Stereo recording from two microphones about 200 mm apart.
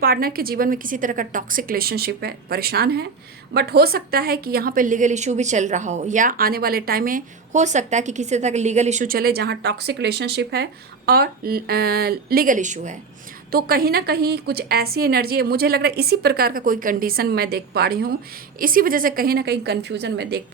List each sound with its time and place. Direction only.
0.0 s a woman's voice: 50° right (ahead or behind)
13.5 s a woman's voice: 50° right (ahead or behind)